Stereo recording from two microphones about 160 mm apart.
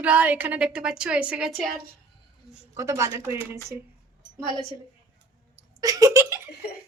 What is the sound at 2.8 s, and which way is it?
A woman's voice, 20° right (ahead or behind).